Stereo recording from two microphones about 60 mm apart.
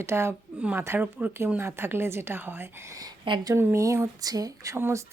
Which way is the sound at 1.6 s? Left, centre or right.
Right.